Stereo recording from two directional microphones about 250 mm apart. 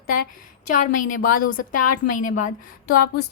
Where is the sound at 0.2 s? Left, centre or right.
Left.